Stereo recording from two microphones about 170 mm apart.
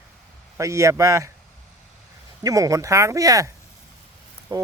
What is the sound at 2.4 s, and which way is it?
Speech, 20° right (ahead or behind).